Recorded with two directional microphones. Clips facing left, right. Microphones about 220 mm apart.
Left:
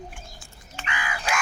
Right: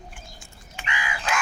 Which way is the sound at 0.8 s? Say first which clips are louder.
Even; 25° right (ahead or behind).